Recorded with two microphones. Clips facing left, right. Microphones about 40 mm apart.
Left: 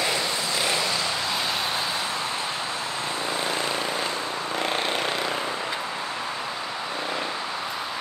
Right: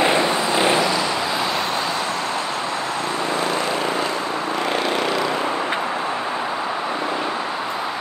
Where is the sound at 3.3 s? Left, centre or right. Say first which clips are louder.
Right 5 dB; right.